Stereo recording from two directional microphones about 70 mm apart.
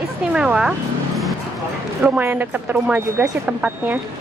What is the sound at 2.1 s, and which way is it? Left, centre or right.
A woman's voice, right.